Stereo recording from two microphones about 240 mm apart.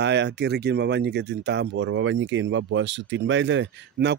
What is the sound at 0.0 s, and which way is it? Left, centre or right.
Speech, right.